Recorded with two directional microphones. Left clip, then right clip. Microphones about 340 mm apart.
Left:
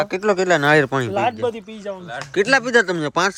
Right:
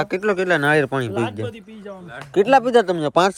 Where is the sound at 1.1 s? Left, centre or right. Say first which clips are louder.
Left 5 dB; left.